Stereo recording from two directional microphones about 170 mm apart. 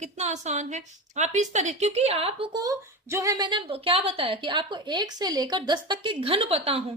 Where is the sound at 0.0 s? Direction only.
40° right (ahead or behind).